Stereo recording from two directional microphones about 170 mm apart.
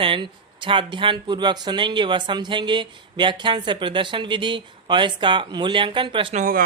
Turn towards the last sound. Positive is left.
turn(degrees=-55)  # may be behind; listen again after turning